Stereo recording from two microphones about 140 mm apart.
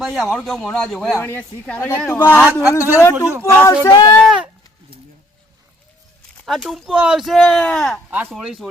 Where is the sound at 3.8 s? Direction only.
30° left (ahead or behind).